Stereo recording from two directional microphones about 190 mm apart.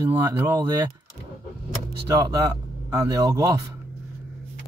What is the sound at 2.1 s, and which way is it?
Speech, 20° right (ahead or behind).